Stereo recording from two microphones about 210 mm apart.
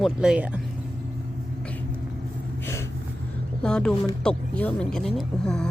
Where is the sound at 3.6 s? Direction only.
5° left (ahead or behind).